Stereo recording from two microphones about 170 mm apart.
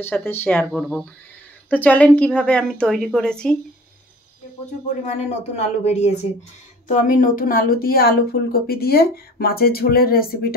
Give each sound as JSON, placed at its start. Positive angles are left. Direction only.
{"t": 0.0, "sound": "a woman's voice", "side_deg": 10}
{"t": 4.8, "sound": "speech", "side_deg": 45}
{"t": 6.9, "sound": "speech", "side_deg": 50}